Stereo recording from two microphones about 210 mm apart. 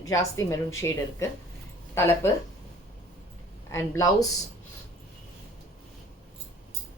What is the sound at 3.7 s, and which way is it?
Speech, 15° left (ahead or behind).